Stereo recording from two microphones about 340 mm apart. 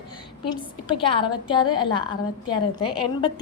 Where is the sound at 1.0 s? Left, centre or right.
Centre.